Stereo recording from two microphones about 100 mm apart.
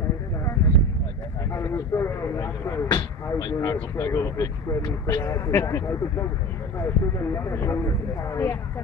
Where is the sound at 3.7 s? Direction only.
30° left (ahead or behind).